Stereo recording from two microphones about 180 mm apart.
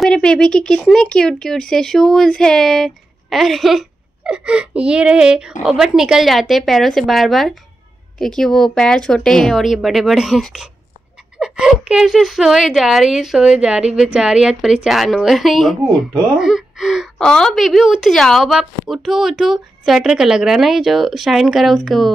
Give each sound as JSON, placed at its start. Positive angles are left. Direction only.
{"t": 0.0, "sound": "a woman's voice", "side_deg": 5}